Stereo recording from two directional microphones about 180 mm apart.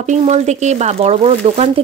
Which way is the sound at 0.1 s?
40° right (ahead or behind).